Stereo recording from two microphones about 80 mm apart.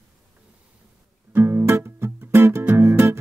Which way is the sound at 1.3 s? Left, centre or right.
Right.